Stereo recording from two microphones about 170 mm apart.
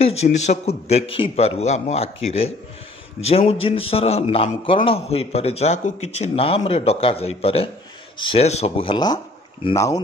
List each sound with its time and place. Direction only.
0.0 s a man's voice: 40° left (ahead or behind)